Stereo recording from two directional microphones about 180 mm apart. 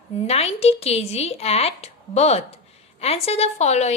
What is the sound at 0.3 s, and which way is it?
A woman's voice, 35° left (ahead or behind).